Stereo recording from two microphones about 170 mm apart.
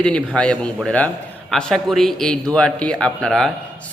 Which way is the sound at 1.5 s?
5° left (ahead or behind).